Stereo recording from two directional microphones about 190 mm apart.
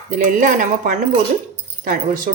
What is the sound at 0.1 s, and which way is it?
Speech, 45° right (ahead or behind).